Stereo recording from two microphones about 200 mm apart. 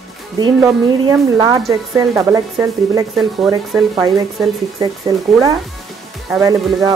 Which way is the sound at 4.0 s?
15° right (ahead or behind).